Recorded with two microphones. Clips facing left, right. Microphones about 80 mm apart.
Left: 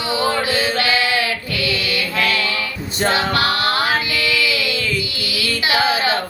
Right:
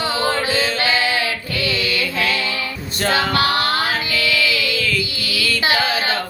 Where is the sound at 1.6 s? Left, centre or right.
Right.